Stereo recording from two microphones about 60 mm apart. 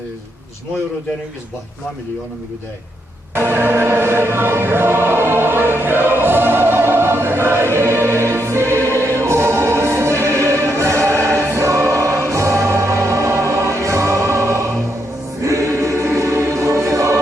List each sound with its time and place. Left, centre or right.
3.3 s choir: right